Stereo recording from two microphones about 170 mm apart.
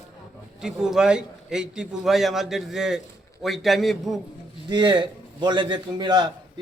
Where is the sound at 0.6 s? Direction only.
5° right (ahead or behind).